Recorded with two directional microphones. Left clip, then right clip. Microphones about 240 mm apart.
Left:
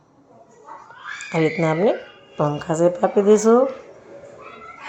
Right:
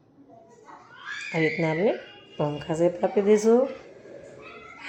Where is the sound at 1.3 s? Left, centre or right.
Centre.